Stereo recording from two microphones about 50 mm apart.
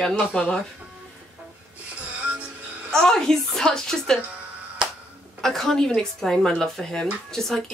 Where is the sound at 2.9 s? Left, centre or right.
Centre.